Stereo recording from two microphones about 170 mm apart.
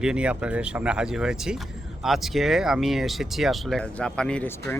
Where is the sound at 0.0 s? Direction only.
5° right (ahead or behind).